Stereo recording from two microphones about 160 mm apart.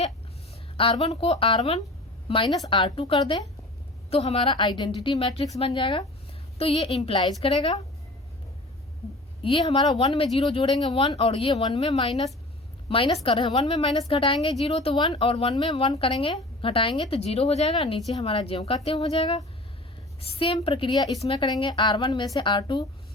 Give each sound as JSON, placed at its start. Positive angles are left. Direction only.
{"t": 0.8, "sound": "speech", "side_deg": 35}
{"t": 9.4, "sound": "a woman's voice", "side_deg": 30}